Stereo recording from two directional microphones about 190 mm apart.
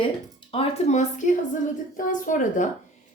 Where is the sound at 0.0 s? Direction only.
30° left (ahead or behind).